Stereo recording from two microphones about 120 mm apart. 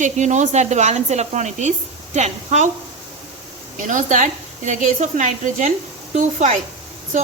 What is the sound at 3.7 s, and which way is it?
A woman's voice, 90° right.